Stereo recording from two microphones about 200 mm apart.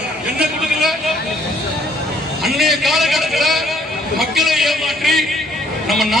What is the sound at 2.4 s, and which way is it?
A man's voice, centre (ahead or behind).